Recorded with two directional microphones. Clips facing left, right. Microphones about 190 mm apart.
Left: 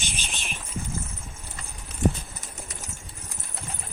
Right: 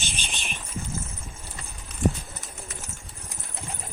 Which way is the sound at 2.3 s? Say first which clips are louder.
Even; centre (ahead or behind).